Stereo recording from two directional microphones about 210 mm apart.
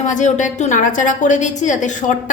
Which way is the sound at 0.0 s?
35° left (ahead or behind).